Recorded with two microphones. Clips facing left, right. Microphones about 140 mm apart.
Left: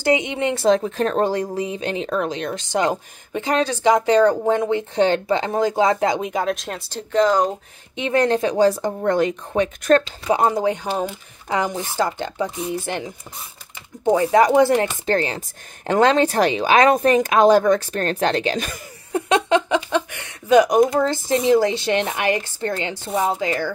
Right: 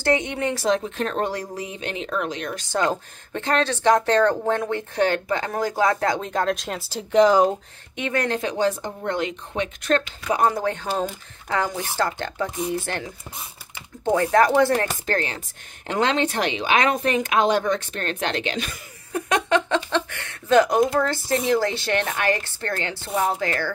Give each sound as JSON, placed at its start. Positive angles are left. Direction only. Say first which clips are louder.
{"t": 0.0, "sound": "speech", "louder": "left 3 dB", "side_deg": 15}
{"t": 2.7, "sound": "speech", "louder": "left 2 dB", "side_deg": 15}
{"t": 7.1, "sound": "speech", "louder": "right 1 dB", "side_deg": -10}
{"t": 7.9, "sound": "speech", "louder": "left 6 dB", "side_deg": 25}
{"t": 10.2, "sound": "speech", "louder": "left 3 dB", "side_deg": 25}
{"t": 15.0, "sound": "speech", "louder": "left 5 dB", "side_deg": 30}
{"t": 15.9, "sound": "speech", "louder": "left 6 dB", "side_deg": 40}
{"t": 19.1, "sound": "speech", "louder": "left 3 dB", "side_deg": 25}